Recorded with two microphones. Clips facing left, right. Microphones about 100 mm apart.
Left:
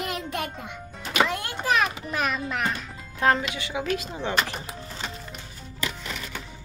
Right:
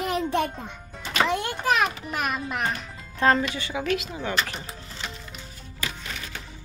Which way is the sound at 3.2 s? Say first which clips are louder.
Right 1 dB; 5° left (ahead or behind).